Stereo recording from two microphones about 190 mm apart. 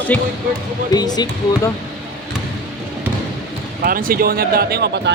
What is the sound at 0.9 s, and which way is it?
Speech, 20° left (ahead or behind).